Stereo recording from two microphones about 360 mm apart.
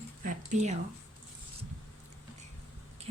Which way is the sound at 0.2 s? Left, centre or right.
Right.